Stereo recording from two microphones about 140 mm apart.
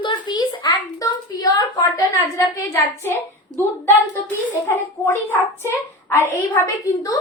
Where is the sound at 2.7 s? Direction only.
20° left (ahead or behind).